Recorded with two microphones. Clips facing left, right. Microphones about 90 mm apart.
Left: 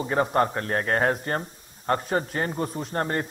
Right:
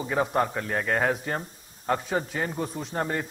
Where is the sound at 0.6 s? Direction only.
40° left (ahead or behind).